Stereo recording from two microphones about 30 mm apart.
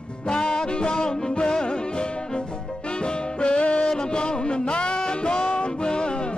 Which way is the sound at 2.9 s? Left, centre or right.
Left.